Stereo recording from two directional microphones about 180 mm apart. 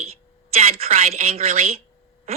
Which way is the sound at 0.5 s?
35° right (ahead or behind).